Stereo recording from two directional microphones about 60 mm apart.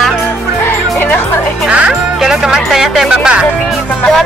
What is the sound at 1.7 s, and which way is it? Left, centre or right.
Speech, centre.